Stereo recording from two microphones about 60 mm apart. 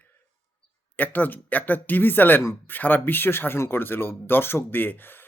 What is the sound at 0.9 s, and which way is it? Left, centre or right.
Speech, left.